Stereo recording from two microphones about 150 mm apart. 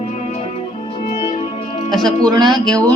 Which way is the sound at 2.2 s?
30° right (ahead or behind).